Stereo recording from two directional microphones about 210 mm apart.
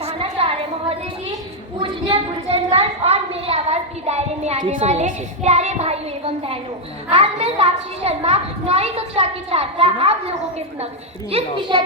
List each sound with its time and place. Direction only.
0.0 s a sound: 30° right (ahead or behind)
1.8 s a child's voice: 25° right (ahead or behind)
11.3 s a child's voice: 30° right (ahead or behind)